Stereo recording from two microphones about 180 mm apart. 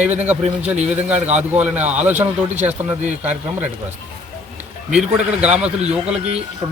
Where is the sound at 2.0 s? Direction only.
10° right (ahead or behind).